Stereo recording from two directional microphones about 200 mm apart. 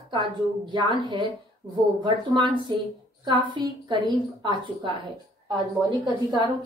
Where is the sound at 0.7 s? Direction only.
25° right (ahead or behind).